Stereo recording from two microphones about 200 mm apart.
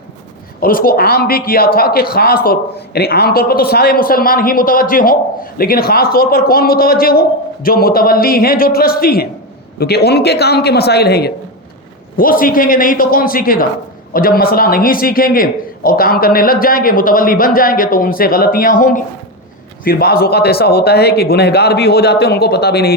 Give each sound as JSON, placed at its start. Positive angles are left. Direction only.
{"t": 0.6, "sound": "a man's voice", "side_deg": 45}